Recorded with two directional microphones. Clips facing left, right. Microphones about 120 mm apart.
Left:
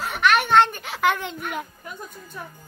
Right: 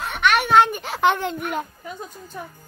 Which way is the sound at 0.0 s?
Centre (ahead or behind).